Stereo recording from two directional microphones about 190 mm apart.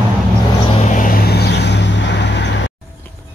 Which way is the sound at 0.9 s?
45° left (ahead or behind).